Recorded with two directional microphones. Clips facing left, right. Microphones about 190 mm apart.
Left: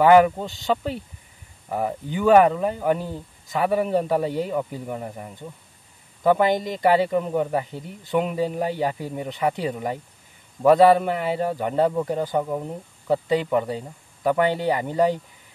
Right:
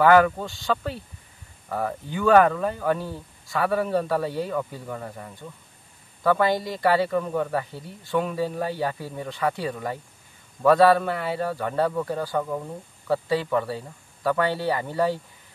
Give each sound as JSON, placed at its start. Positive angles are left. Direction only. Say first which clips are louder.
{"t": 0.0, "sound": "a man's voice", "louder": "left 2 dB", "side_deg": 20}